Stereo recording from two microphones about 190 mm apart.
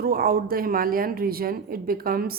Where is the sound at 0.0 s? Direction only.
50° right (ahead or behind).